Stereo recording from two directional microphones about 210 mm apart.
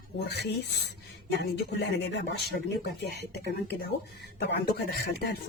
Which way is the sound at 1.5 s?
50° left (ahead or behind).